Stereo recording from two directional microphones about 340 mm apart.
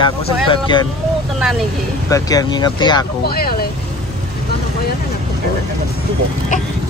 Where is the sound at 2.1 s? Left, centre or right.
Centre.